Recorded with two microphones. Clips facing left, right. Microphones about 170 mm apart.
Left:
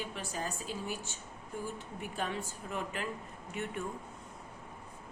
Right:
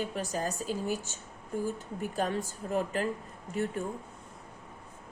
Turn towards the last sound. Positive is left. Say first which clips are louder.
# right 6 dB
turn(degrees=-35)  # may be behind; listen again after turning